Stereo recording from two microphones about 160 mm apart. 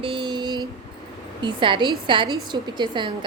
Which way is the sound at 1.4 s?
30° right (ahead or behind).